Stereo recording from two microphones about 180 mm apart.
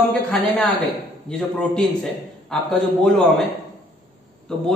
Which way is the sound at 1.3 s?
5° left (ahead or behind).